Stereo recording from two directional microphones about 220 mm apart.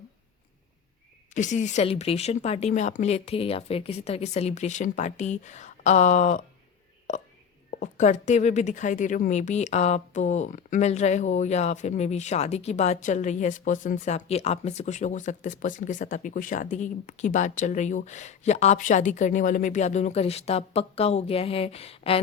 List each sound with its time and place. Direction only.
1.3 s speech: 35° left (ahead or behind)
7.7 s speech: 35° left (ahead or behind)